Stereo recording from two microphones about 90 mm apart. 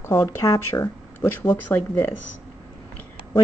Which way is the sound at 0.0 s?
40° left (ahead or behind).